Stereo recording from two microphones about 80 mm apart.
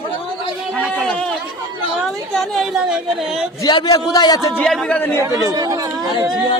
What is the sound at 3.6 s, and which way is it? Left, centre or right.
Speech, left.